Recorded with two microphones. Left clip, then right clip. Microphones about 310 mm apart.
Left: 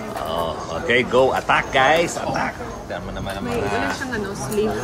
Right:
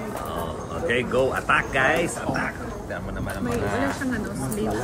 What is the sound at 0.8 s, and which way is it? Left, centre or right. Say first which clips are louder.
Speech: left 6 dB; centre.